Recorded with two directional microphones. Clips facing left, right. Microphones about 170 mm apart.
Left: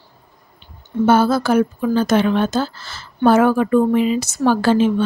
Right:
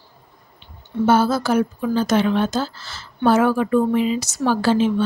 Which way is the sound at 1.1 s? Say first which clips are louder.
Left 2 dB; 60° left (ahead or behind).